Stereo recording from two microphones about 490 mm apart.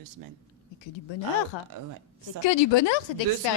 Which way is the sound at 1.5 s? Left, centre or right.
Left.